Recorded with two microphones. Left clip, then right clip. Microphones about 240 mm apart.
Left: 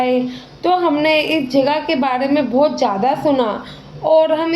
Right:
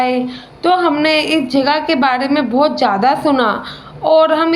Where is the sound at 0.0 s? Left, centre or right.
Right.